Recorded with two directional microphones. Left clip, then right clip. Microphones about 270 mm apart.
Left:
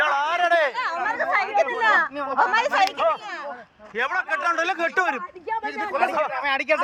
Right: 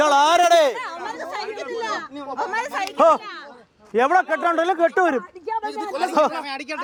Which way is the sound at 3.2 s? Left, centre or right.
Centre.